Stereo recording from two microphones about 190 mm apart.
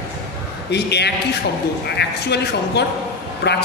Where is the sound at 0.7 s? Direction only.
60° left (ahead or behind).